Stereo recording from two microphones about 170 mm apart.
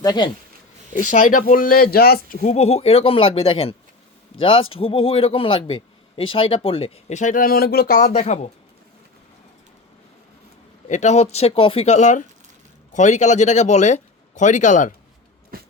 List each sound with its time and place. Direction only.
0.0 s speech: 25° left (ahead or behind)
0.9 s speech: 50° left (ahead or behind); by 2.4 s 65° left (ahead or behind)
2.4 s a man's voice: 45° left (ahead or behind)
10.8 s a man's voice: 45° left (ahead or behind)
15.5 s a sound: 60° right (ahead or behind)